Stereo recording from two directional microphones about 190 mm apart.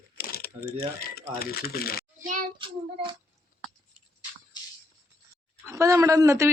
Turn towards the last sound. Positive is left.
turn(degrees=-15)  # may be behind; listen again after turning